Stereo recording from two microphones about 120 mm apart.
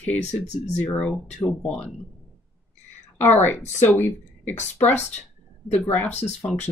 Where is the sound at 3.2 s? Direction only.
15° left (ahead or behind).